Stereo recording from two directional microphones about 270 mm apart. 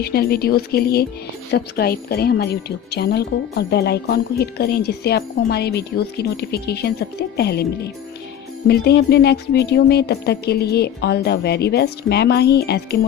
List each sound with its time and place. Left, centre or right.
0.0 s speech: left